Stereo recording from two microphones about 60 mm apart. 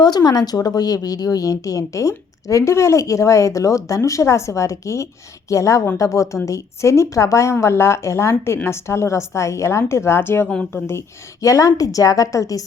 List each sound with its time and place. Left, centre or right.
0.1 s a woman's voice: left
11.3 s a woman's voice: left